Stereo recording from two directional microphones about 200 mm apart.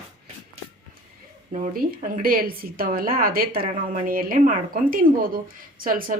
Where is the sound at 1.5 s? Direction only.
45° right (ahead or behind).